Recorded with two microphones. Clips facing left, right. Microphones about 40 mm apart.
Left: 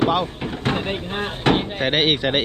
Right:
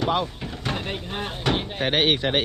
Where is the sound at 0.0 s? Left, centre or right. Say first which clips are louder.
Left 4 dB; left.